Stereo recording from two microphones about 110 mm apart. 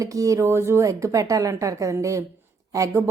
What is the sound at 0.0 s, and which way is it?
A woman's voice, 30° right (ahead or behind).